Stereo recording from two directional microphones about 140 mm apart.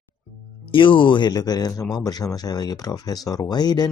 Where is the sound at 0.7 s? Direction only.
35° left (ahead or behind).